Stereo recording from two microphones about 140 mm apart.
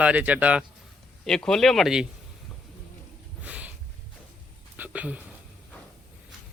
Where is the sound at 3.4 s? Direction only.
10° right (ahead or behind).